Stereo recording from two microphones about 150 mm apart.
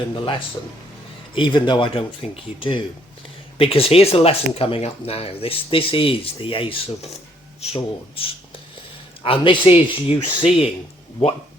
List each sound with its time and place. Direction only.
0.2 s speech: 35° left (ahead or behind)